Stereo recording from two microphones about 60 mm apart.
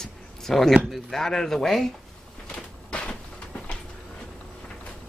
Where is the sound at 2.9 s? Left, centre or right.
Centre.